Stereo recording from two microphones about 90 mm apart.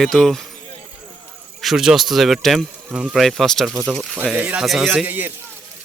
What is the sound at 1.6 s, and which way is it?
Speech, 5° right (ahead or behind).